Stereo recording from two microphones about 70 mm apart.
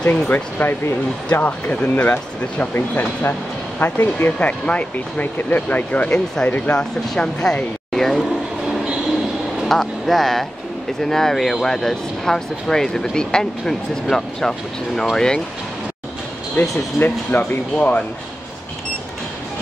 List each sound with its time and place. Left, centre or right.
0.0 s speech: left
6.8 s speech: centre
8.6 s train: centre
9.7 s a sound: centre
11.0 s speech: centre
16.6 s speech: left
17.0 s speech: centre